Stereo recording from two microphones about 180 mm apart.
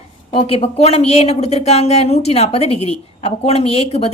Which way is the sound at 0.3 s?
35° left (ahead or behind).